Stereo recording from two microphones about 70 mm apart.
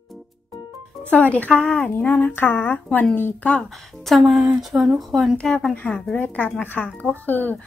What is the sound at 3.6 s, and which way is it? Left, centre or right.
A woman's voice, centre.